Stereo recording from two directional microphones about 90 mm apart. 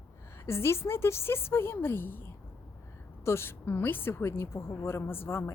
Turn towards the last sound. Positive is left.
turn(degrees=25)  # may be behind; listen again after turning